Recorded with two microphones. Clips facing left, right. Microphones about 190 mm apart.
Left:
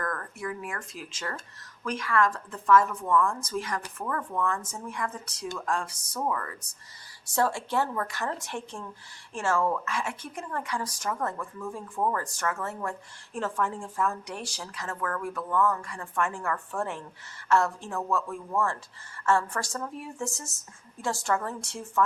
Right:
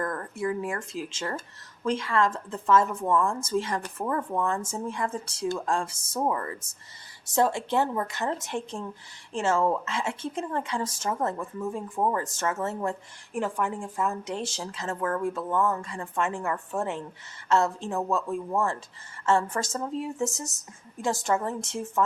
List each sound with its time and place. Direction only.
0.0 s speech: 25° right (ahead or behind)